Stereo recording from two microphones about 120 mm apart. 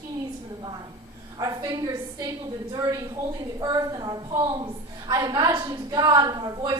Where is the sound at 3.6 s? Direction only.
35° right (ahead or behind).